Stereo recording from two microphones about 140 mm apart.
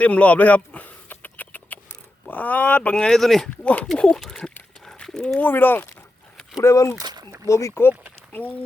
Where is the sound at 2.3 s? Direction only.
10° left (ahead or behind).